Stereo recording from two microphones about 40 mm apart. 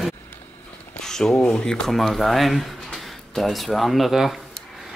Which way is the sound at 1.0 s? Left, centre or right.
Centre.